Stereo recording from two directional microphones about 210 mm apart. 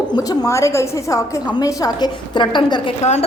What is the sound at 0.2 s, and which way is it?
A woman's voice, 15° left (ahead or behind).